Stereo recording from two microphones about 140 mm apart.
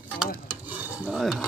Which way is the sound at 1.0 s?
5° right (ahead or behind).